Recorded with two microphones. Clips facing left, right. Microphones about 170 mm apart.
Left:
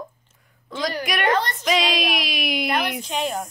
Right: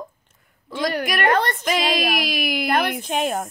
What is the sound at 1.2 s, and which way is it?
Speech, 55° right (ahead or behind).